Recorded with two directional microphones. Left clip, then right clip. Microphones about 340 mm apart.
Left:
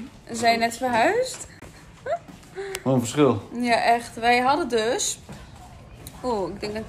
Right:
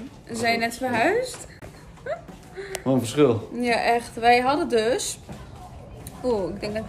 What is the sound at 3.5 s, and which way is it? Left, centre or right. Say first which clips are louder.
Speech: left 1 dB; centre.